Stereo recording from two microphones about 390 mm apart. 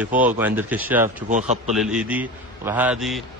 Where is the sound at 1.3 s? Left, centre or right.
Centre.